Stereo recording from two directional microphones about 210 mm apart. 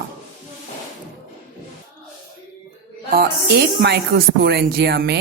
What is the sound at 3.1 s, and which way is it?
A man's voice, 50° right (ahead or behind).